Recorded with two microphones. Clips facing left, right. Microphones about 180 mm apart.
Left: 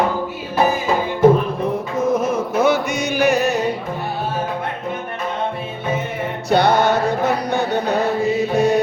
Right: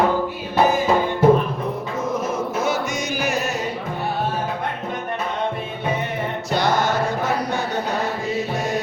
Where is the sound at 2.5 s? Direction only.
65° left (ahead or behind).